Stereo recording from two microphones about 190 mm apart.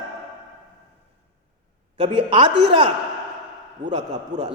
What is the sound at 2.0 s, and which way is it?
Speech, 30° right (ahead or behind).